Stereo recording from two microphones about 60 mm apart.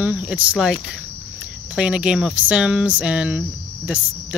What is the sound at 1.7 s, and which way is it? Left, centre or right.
Speech, centre.